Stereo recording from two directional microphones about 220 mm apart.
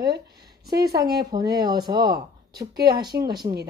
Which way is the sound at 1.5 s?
20° right (ahead or behind).